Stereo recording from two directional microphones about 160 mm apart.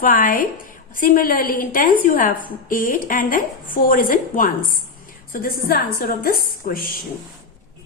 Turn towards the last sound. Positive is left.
turn(degrees=65)  # may be behind; listen again after turning